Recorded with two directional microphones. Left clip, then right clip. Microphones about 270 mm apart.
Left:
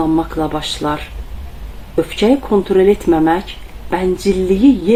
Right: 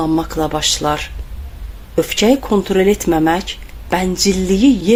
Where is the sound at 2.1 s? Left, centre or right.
Right.